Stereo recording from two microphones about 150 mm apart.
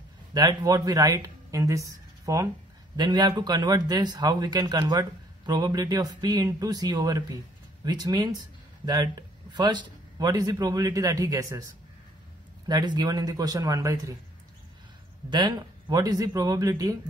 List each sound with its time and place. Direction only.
0.3 s speech: 25° right (ahead or behind)
15.2 s speech: 30° right (ahead or behind)